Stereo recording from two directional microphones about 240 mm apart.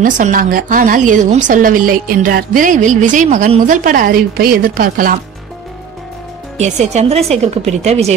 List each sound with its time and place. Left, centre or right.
0.0 s speech: right
6.6 s a woman's voice: right